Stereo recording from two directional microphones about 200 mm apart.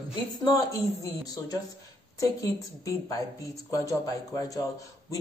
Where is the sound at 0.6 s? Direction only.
20° left (ahead or behind).